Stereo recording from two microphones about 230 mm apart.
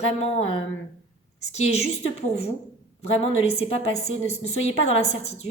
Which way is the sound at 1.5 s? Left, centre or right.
Left.